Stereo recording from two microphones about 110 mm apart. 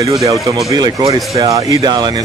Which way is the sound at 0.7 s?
30° right (ahead or behind).